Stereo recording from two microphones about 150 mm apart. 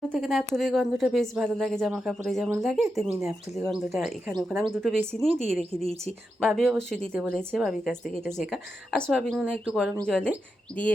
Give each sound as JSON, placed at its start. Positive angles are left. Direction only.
{"t": 0.1, "sound": "speech", "side_deg": 0}
{"t": 3.1, "sound": "speech", "side_deg": -20}
{"t": 3.7, "sound": "speech", "side_deg": 0}
{"t": 10.0, "sound": "speech", "side_deg": 5}